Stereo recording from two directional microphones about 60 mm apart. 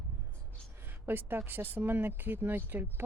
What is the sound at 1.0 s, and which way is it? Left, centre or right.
Speech, right.